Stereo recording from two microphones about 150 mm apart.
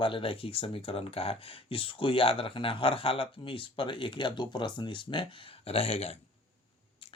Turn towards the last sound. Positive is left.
turn(degrees=45)  # may be behind; listen again after turning